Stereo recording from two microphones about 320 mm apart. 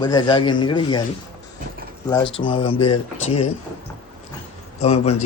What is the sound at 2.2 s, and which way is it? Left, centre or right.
Speech, left.